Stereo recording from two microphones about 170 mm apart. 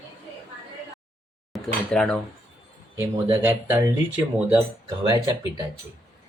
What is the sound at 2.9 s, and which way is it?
Speech, 15° right (ahead or behind).